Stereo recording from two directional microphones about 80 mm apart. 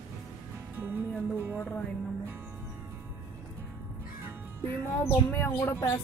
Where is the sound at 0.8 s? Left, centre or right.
Right.